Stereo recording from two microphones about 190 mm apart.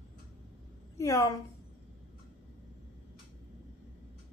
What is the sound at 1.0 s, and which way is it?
Speech, 15° left (ahead or behind).